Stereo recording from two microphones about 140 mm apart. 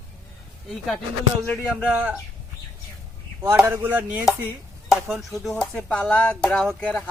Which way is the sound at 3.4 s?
15° right (ahead or behind).